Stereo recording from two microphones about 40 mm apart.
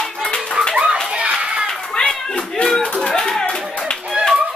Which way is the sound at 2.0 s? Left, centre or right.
Left.